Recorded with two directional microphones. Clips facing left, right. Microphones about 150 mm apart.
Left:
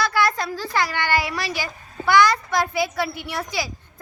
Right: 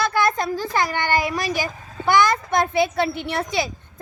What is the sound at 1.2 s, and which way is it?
Speech, 45° right (ahead or behind).